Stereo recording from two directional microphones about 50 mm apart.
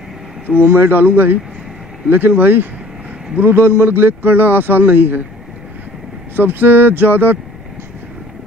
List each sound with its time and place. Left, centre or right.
0.7 s a man's voice: right
6.3 s a man's voice: right